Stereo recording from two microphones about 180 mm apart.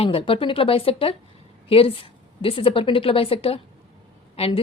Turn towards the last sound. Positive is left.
turn(degrees=35)  # may be behind; listen again after turning